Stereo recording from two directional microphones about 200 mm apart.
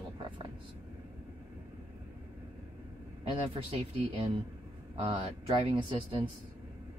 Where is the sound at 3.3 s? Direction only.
30° right (ahead or behind).